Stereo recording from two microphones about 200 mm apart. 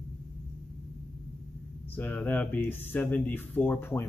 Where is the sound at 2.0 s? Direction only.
5° left (ahead or behind).